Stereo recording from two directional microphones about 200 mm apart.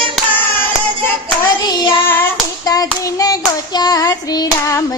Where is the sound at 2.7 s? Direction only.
20° left (ahead or behind).